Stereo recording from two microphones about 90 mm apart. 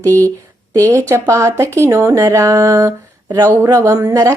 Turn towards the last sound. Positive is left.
turn(degrees=-40)  # may be behind; listen again after turning